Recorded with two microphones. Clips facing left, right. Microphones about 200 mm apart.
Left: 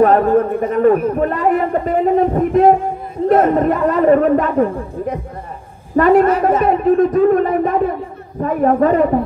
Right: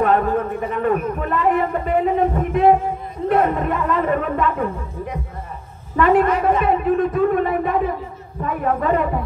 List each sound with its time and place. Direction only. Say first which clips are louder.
0.0 s speech: left 6 dB; 40° left (ahead or behind)
5.9 s speech: left 5 dB; 45° left (ahead or behind)